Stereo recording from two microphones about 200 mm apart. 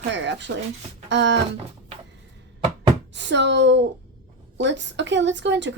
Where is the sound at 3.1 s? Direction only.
60° right (ahead or behind).